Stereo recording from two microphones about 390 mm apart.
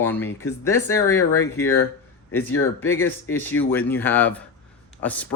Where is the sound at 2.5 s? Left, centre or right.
Left.